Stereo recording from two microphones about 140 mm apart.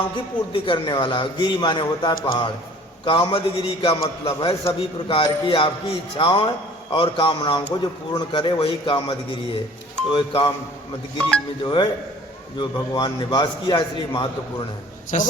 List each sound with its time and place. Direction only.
0.5 s a man's voice: 35° left (ahead or behind)
4.0 s a man's voice: 25° left (ahead or behind)
11.2 s speech: 10° left (ahead or behind)
11.6 s a man's voice: 35° left (ahead or behind)
15.1 s a man's voice: 60° left (ahead or behind)